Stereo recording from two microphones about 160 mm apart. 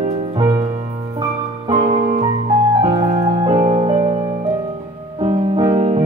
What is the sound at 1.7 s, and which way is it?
Music, 30° right (ahead or behind).